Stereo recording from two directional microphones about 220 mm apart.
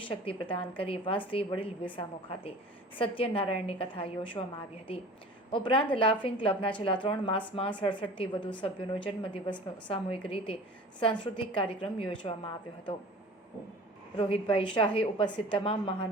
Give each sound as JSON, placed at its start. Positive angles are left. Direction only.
{"t": 0.0, "sound": "a woman's voice", "side_deg": 25}
{"t": 14.2, "sound": "a woman's voice", "side_deg": 25}